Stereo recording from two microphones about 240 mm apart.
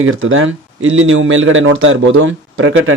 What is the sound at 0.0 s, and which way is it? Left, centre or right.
Speech, right.